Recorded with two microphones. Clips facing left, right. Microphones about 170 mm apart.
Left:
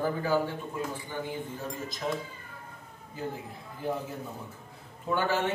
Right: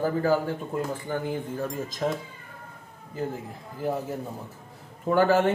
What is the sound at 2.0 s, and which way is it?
Speech, 45° right (ahead or behind).